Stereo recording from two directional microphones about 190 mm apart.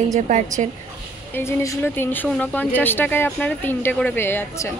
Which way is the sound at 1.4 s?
15° left (ahead or behind).